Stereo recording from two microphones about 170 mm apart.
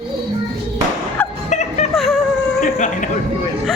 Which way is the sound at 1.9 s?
Centre (ahead or behind).